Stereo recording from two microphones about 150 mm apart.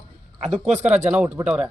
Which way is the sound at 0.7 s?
50° right (ahead or behind).